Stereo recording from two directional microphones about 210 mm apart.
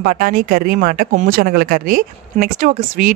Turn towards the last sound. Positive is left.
turn(degrees=-35)  # may be behind; listen again after turning